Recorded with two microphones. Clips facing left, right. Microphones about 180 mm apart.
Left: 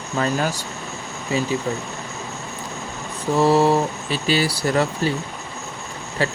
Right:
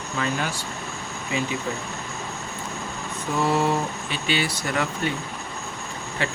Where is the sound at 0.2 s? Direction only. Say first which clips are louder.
Left 5 dB; 40° left (ahead or behind).